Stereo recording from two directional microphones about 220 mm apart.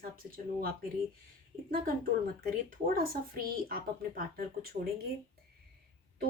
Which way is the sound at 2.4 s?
40° right (ahead or behind).